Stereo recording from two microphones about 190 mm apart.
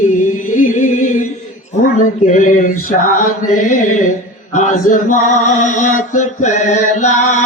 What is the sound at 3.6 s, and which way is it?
Male singing, 40° left (ahead or behind).